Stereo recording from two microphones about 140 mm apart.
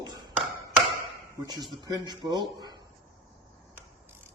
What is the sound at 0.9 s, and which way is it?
Chop, 20° right (ahead or behind).